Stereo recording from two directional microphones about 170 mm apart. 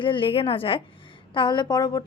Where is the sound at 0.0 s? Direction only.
30° left (ahead or behind).